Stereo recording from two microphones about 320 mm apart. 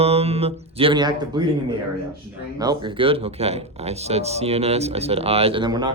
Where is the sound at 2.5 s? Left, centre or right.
Centre.